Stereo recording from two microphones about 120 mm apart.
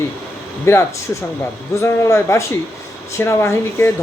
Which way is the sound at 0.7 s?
20° left (ahead or behind).